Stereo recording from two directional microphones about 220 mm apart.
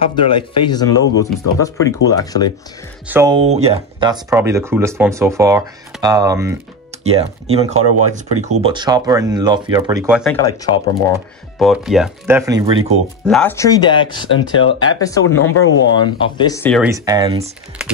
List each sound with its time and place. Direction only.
0.0 s speech: 20° left (ahead or behind)
3.1 s speech: 10° right (ahead or behind)
3.3 s speech: 30° right (ahead or behind)
7.0 s speech: 25° right (ahead or behind); by 10.3 s 5° right (ahead or behind)
11.5 s speech: centre (ahead or behind); by 12.8 s 15° right (ahead or behind)
13.2 s speech: 5° left (ahead or behind); by 14.4 s 20° left (ahead or behind)
14.5 s speech: 65° left (ahead or behind)
15.0 s speech: 15° left (ahead or behind)
15.5 s speech: 65° left (ahead or behind)
16.0 s speech: 20° left (ahead or behind)
16.9 s speech: 15° right (ahead or behind)
17.8 s typing: 5° right (ahead or behind)